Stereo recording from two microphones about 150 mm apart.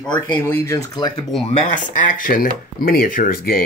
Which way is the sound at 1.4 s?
50° left (ahead or behind).